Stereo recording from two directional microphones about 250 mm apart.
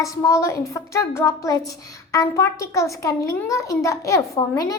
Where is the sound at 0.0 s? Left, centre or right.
Centre.